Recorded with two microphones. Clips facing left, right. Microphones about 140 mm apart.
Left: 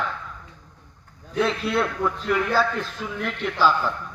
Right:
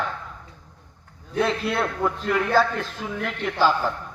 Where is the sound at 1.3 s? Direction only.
40° right (ahead or behind).